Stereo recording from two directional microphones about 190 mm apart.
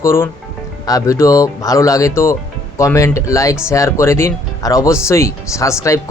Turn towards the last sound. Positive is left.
turn(degrees=15)  # may be behind; listen again after turning